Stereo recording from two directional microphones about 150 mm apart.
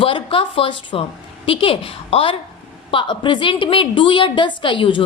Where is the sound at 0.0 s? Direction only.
35° left (ahead or behind).